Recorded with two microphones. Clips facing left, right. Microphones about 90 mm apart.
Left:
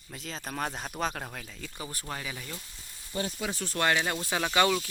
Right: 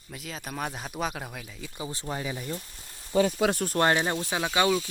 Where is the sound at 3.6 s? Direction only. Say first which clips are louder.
Right 4 dB; 40° right (ahead or behind).